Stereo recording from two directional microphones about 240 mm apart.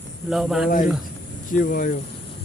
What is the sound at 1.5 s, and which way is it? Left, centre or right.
Speech, left.